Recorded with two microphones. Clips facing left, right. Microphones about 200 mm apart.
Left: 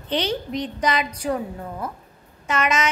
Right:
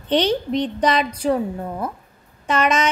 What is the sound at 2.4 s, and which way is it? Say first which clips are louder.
Speech: right 4 dB; 30° right (ahead or behind).